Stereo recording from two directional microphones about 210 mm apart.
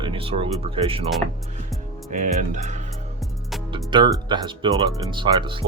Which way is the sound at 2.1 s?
35° right (ahead or behind).